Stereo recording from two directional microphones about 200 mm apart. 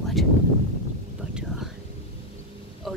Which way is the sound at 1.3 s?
5° right (ahead or behind).